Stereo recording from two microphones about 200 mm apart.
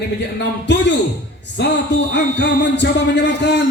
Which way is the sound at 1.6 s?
55° left (ahead or behind).